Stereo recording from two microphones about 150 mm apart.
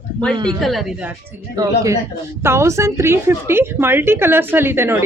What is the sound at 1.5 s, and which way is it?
A woman's voice, 25° right (ahead or behind).